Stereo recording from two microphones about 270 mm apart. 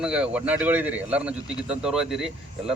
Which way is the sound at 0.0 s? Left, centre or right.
Centre.